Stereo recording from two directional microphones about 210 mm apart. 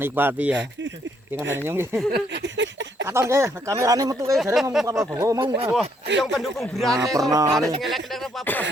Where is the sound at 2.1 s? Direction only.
55° right (ahead or behind).